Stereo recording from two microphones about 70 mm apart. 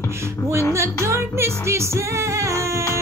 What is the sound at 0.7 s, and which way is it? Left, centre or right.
Music, right.